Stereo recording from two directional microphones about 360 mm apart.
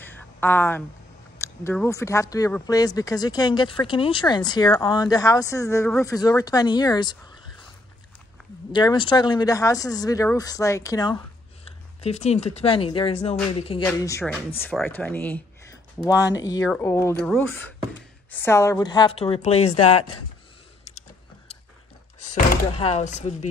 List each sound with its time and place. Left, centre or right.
0.0 s a sound: centre
1.4 s speech: centre
8.7 s speech: centre
22.3 s speech: centre